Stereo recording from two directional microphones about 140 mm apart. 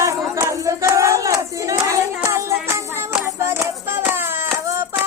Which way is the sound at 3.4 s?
20° right (ahead or behind).